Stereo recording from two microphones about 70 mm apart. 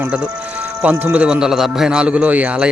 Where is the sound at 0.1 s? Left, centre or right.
Centre.